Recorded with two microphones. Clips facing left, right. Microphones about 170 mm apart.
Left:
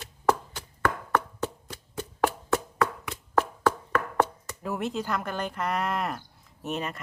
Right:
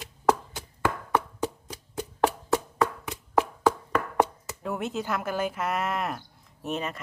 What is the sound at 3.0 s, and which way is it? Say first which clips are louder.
Hands: right 1 dB; 10° right (ahead or behind).